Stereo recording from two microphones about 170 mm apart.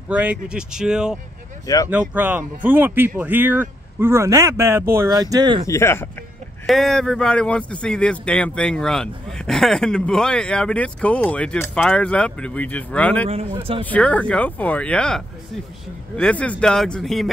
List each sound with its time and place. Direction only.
0.1 s speech: 10° right (ahead or behind)
5.7 s speech: 15° left (ahead or behind)
6.6 s speech: centre (ahead or behind)
13.3 s speech: 35° right (ahead or behind)
13.8 s speech: 10° left (ahead or behind)